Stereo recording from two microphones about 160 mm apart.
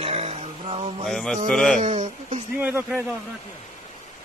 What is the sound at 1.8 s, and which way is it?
Speech, 45° right (ahead or behind).